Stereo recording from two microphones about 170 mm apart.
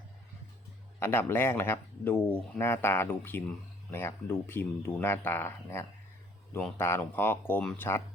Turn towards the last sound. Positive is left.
turn(degrees=10)  # may be behind; listen again after turning